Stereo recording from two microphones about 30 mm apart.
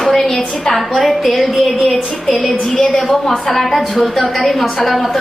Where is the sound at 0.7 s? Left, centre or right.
Centre.